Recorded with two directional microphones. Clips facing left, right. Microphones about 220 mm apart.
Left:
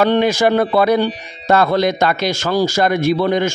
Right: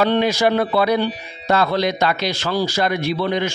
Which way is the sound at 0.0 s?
50° left (ahead or behind).